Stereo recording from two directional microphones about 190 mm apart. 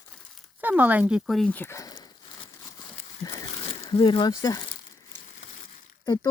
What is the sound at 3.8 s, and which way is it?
Speech, 25° left (ahead or behind).